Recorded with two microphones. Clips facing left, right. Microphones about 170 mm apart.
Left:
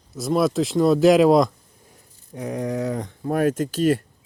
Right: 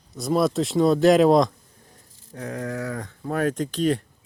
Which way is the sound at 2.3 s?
15° left (ahead or behind).